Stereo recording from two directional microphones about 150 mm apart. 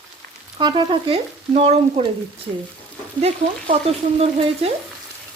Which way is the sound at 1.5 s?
45° right (ahead or behind).